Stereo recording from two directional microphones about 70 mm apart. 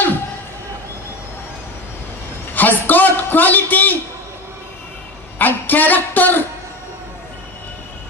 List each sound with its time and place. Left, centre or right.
2.5 s a man's voice: left
5.4 s music: left